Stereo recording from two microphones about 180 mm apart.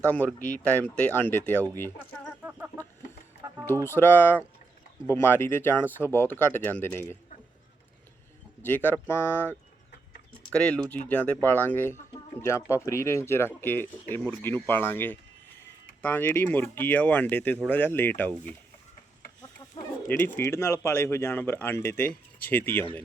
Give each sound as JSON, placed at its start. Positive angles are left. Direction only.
{"t": 0.1, "sound": "speech", "side_deg": 10}
{"t": 2.4, "sound": "chicken", "side_deg": -10}
{"t": 3.8, "sound": "speech", "side_deg": 10}
{"t": 8.6, "sound": "speech", "side_deg": 10}
{"t": 20.1, "sound": "speech", "side_deg": 10}